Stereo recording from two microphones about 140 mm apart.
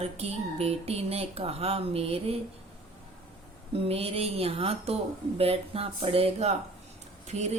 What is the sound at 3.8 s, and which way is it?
A woman's voice, 45° right (ahead or behind).